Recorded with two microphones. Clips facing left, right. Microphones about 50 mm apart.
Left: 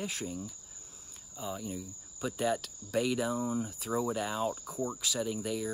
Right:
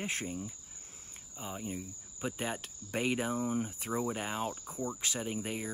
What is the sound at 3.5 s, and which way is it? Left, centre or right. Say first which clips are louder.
Speech: even; right.